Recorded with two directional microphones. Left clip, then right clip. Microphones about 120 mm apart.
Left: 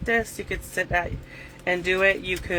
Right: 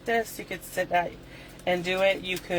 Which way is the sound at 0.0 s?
55° left (ahead or behind).